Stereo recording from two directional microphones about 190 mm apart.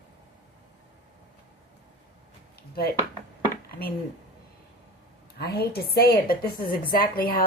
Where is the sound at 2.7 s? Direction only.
55° left (ahead or behind).